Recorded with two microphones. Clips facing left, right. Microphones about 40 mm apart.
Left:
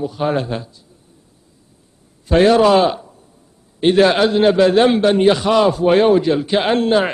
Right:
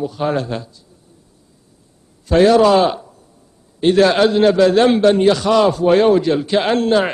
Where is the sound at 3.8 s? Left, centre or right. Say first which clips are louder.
Even; centre.